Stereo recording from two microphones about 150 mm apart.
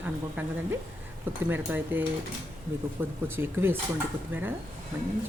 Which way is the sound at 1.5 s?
15° right (ahead or behind).